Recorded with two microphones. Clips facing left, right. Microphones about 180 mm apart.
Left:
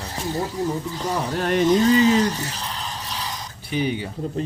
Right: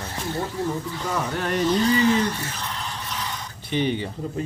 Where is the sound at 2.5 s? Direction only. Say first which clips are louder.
Left 1 dB; 35° left (ahead or behind).